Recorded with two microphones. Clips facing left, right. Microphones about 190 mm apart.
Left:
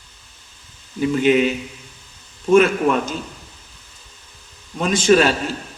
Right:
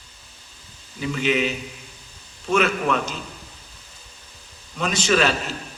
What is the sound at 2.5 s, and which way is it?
Speech, 45° left (ahead or behind).